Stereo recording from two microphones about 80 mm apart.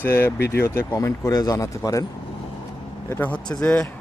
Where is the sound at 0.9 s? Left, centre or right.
Left.